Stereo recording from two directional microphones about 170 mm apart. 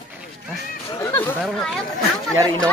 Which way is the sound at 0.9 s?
15° left (ahead or behind).